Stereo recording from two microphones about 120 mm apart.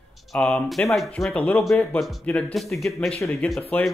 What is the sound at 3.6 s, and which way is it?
Speech, 15° left (ahead or behind).